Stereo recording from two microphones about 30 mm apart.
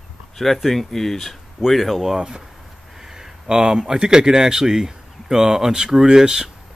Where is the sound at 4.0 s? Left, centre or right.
Right.